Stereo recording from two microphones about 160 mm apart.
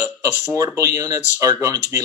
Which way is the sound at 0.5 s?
20° right (ahead or behind).